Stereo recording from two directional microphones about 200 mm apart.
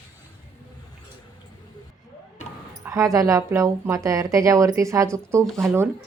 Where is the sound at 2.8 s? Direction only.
15° right (ahead or behind).